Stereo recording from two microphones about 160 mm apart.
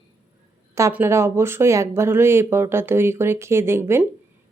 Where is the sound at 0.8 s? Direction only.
15° right (ahead or behind).